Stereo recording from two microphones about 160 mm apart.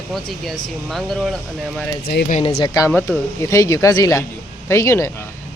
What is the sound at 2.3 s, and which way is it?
Speech, 40° left (ahead or behind).